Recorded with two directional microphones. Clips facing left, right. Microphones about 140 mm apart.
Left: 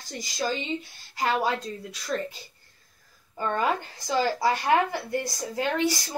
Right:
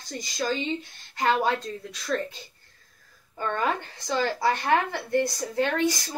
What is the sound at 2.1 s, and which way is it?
Speech, 15° left (ahead or behind).